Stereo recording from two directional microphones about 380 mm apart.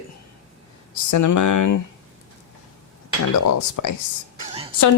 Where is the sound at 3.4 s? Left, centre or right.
Left.